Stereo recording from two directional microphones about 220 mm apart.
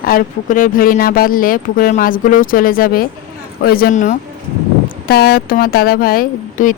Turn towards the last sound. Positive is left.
turn(degrees=40)  # may be behind; listen again after turning